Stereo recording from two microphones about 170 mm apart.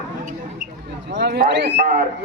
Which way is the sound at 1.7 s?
50° right (ahead or behind).